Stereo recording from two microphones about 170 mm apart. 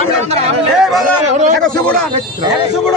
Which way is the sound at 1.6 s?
5° left (ahead or behind).